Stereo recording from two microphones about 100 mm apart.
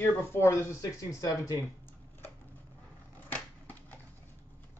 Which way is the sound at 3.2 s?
15° left (ahead or behind).